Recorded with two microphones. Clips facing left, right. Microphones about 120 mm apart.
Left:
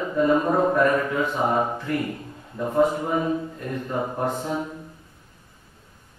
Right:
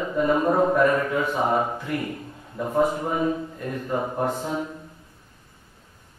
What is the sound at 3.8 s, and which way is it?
Speech, 15° right (ahead or behind).